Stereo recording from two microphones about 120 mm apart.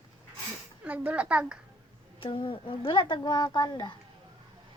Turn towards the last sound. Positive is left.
turn(degrees=40)  # may be behind; listen again after turning